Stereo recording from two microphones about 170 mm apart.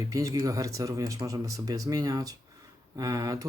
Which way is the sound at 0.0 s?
20° right (ahead or behind).